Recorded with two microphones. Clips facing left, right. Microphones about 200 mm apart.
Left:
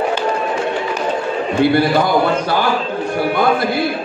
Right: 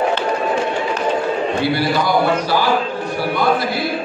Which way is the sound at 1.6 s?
50° left (ahead or behind).